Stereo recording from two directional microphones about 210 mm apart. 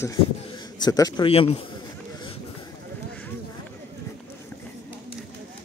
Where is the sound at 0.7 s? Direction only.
20° left (ahead or behind).